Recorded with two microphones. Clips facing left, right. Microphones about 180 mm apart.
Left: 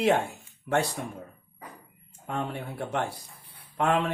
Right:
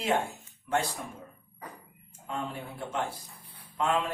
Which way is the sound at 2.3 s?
65° left (ahead or behind).